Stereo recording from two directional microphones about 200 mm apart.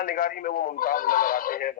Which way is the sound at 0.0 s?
45° left (ahead or behind).